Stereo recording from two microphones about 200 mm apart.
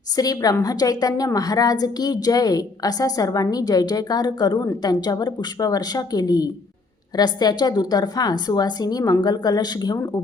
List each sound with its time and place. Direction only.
0.2 s a woman's voice: 20° left (ahead or behind)